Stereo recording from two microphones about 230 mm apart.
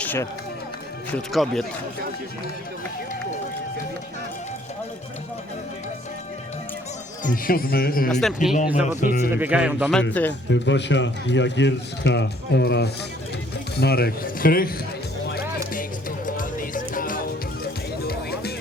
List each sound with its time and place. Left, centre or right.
0.0 s run: centre
1.1 s speech: centre
7.3 s speech: left
8.1 s speech: centre
9.0 s speech: left
9.3 s speech: centre
10.0 s speech: centre
10.5 s a man's voice: left
15.3 s music: left